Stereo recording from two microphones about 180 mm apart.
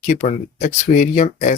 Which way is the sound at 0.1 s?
40° left (ahead or behind).